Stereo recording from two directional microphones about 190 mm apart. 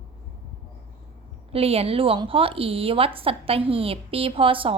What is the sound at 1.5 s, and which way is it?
A woman's voice, 30° right (ahead or behind).